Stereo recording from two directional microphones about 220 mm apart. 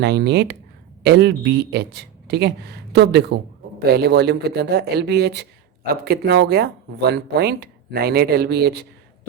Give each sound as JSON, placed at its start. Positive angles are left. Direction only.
{"t": 0.0, "sound": "speech", "side_deg": -50}